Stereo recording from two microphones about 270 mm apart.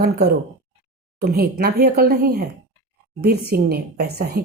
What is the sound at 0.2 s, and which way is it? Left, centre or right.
A woman's voice, right.